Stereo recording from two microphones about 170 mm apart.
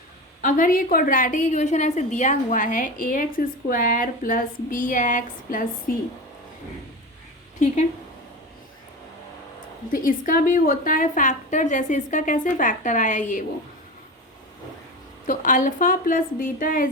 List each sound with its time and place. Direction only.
0.4 s a woman's voice: 50° left (ahead or behind)
9.9 s a woman's voice: 55° left (ahead or behind)
15.3 s a woman's voice: 50° left (ahead or behind)